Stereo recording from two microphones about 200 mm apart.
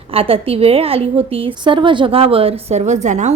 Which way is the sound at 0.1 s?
30° right (ahead or behind).